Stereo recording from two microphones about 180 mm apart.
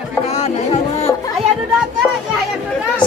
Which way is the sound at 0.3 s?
35° left (ahead or behind).